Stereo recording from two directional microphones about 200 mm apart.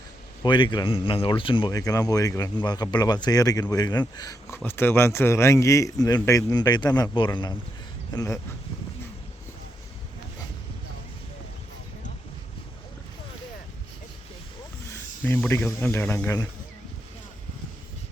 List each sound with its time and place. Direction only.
0.4 s speech: 25° left (ahead or behind)
15.2 s speech: 10° left (ahead or behind)